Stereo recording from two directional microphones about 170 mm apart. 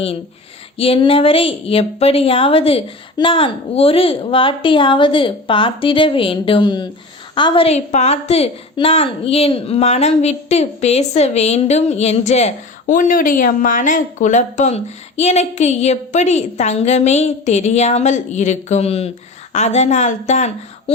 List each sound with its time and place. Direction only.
0.8 s speech: 30° left (ahead or behind)
12.8 s a woman's voice: 55° left (ahead or behind)